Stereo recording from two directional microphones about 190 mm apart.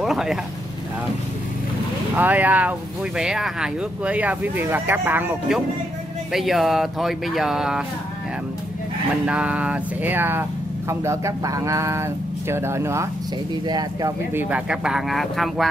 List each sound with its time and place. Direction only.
0.0 s vehicle: centre (ahead or behind)
2.1 s speech: 10° right (ahead or behind)
9.2 s speech: 5° right (ahead or behind)
14.5 s speech: 5° right (ahead or behind)